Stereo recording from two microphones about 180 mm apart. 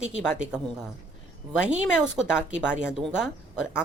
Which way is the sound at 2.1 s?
5° right (ahead or behind).